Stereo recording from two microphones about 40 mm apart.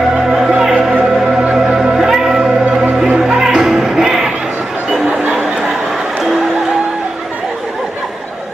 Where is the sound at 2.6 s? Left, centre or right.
Right.